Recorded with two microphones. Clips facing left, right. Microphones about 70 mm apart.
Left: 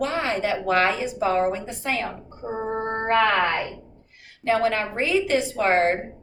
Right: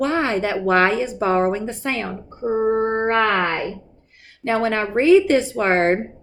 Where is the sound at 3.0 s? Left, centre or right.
Right.